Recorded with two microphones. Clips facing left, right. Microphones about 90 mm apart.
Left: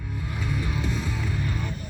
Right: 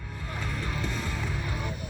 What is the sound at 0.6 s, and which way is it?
Music, 15° left (ahead or behind).